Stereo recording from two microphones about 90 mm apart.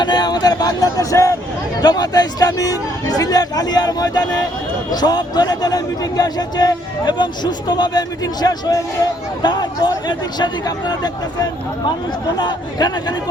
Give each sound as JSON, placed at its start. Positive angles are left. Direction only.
{"t": 0.0, "sound": "speech", "side_deg": 50}
{"t": 1.8, "sound": "a man's voice", "side_deg": 45}
{"t": 12.4, "sound": "a man's voice", "side_deg": 50}